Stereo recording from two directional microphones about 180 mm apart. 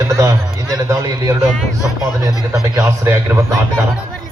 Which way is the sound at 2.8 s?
15° right (ahead or behind).